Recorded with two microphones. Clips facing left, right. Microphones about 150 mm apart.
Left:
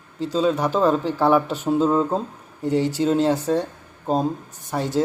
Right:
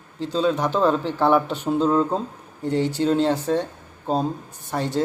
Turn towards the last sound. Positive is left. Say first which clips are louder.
# left 2 dB
turn(degrees=10)  # may be behind; listen again after turning